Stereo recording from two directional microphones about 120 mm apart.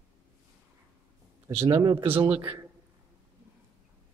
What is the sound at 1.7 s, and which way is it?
Speech, 35° right (ahead or behind).